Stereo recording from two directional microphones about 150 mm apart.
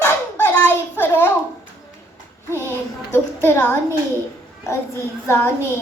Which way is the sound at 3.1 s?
15° left (ahead or behind).